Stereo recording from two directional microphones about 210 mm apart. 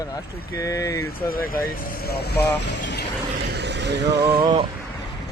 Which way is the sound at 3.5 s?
55° right (ahead or behind).